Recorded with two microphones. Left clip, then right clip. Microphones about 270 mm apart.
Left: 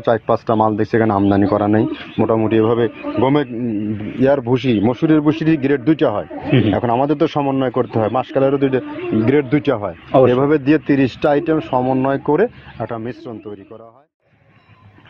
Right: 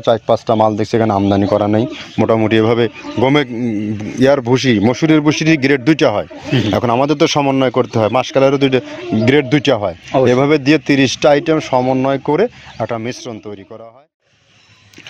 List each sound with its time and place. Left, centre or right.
0.0 s speech: right